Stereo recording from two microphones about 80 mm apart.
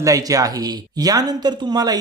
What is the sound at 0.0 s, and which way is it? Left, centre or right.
Speech, right.